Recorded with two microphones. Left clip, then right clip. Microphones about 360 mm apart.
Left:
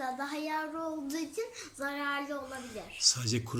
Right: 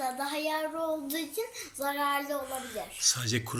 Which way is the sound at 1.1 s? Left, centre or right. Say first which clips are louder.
Right 2 dB; centre.